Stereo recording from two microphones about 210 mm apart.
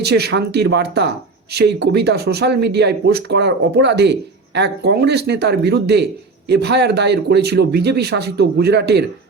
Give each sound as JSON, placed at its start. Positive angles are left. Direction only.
{"t": 0.0, "sound": "speech", "side_deg": -50}